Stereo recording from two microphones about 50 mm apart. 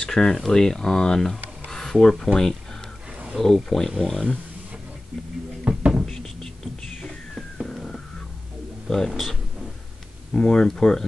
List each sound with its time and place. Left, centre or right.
0.0 s speech: centre
1.7 s a sound: centre
3.3 s speech: centre
5.6 s cupboard open or close: right
6.0 s whispering: centre
8.8 s a sound: centre
9.1 s speech: centre
10.3 s speech: centre